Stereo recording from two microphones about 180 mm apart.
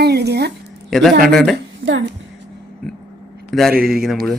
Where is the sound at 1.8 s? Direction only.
50° right (ahead or behind).